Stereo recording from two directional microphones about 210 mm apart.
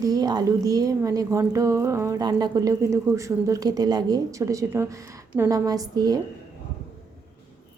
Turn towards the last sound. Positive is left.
turn(degrees=-20)  # may be behind; listen again after turning